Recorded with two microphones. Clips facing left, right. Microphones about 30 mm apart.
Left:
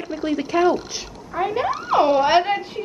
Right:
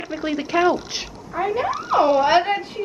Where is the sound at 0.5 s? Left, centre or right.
Right.